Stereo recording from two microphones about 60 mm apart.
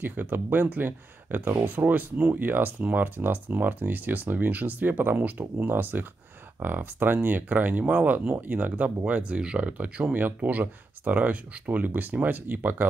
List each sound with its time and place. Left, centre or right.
0.0 s speech: right